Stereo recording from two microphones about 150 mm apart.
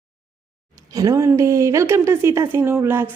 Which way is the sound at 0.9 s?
20° right (ahead or behind).